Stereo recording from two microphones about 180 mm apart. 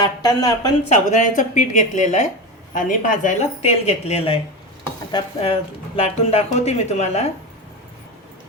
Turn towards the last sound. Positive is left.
turn(degrees=35)  # may be behind; listen again after turning